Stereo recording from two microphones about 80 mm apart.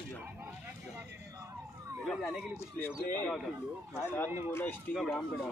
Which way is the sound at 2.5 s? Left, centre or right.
Left.